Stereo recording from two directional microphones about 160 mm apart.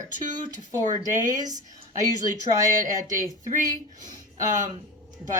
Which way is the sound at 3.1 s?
55° right (ahead or behind).